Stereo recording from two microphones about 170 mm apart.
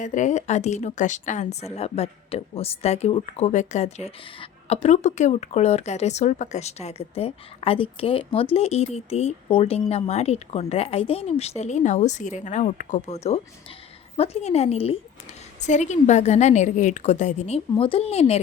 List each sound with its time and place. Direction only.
0.0 s a woman's voice: 45° left (ahead or behind)